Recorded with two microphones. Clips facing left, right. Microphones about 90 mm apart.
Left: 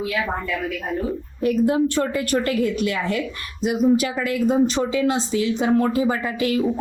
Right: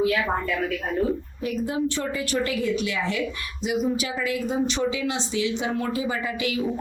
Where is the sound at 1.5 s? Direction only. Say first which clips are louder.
Left 7 dB; 50° left (ahead or behind).